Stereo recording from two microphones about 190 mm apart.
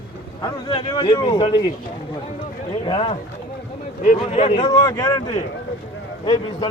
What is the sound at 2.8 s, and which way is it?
Speech, 25° left (ahead or behind).